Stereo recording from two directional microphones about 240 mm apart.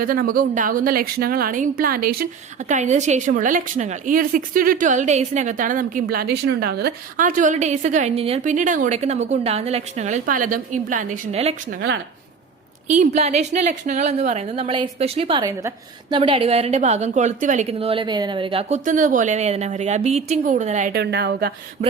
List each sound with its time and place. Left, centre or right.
0.0 s a woman's voice: right
12.9 s a woman's voice: right